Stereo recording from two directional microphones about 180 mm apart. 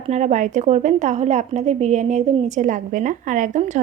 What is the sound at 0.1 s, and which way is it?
A woman's voice, 40° right (ahead or behind).